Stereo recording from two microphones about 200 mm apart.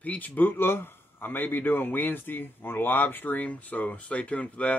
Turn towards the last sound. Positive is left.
turn(degrees=5)  # may be behind; listen again after turning